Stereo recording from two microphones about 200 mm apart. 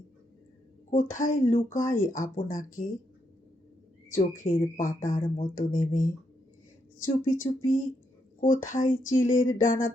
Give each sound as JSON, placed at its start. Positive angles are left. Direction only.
{"t": 0.9, "sound": "speech", "side_deg": 40}
{"t": 4.1, "sound": "speech", "side_deg": 40}